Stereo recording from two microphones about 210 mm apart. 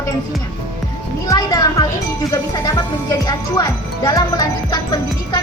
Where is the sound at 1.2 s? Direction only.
15° left (ahead or behind).